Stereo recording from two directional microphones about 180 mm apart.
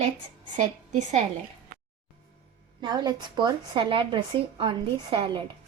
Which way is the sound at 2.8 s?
25° right (ahead or behind).